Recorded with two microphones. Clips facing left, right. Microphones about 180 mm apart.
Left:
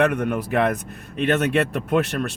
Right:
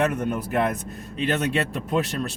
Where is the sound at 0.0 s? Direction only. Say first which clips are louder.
Left 3 dB; 65° left (ahead or behind).